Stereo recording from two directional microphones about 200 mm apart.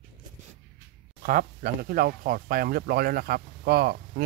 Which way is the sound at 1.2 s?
50° right (ahead or behind).